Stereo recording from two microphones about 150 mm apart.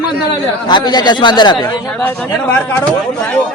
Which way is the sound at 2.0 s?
15° left (ahead or behind).